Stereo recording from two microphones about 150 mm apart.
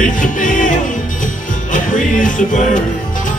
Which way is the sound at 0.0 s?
60° left (ahead or behind).